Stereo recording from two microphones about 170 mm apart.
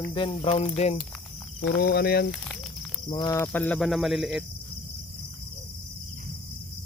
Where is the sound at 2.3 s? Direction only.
5° left (ahead or behind).